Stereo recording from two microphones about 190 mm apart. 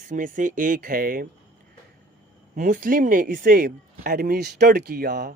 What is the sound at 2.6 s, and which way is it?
Speech, 45° right (ahead or behind).